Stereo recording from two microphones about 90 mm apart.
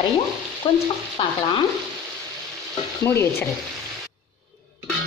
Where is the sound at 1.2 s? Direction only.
55° left (ahead or behind).